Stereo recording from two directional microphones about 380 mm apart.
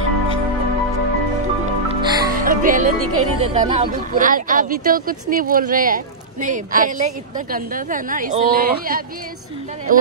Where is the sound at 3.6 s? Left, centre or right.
Right.